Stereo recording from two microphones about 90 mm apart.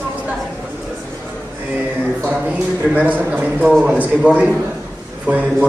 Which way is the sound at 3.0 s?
15° right (ahead or behind).